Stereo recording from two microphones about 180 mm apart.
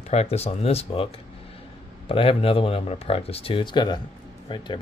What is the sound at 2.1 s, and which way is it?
Speech, 30° left (ahead or behind).